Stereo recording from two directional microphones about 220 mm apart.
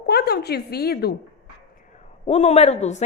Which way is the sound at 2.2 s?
30° left (ahead or behind).